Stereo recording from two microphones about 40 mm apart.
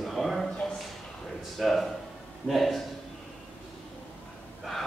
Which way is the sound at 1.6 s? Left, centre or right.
Centre.